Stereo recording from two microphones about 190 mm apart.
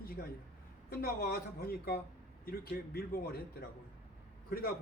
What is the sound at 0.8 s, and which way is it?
A man's voice, 50° left (ahead or behind).